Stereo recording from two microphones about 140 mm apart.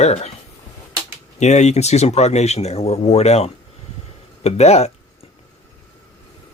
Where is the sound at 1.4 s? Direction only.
55° left (ahead or behind).